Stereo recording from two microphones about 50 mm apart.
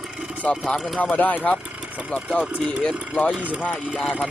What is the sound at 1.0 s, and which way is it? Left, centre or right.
Speech, left.